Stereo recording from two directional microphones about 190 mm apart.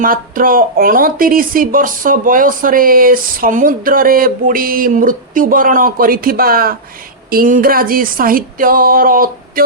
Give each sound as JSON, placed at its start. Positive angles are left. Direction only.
{"t": 0.0, "sound": "speech", "side_deg": -45}